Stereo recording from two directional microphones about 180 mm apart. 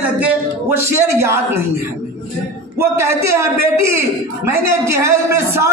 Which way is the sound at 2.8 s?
15° right (ahead or behind).